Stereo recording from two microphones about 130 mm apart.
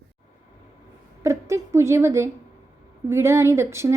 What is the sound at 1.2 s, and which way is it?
A woman's voice, 20° right (ahead or behind).